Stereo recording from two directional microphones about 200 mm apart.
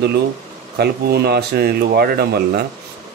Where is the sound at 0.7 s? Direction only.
55° right (ahead or behind).